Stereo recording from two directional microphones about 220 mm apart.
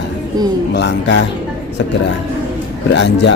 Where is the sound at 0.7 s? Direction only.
50° left (ahead or behind).